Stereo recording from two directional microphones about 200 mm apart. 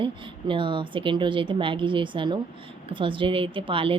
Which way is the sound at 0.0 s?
25° right (ahead or behind).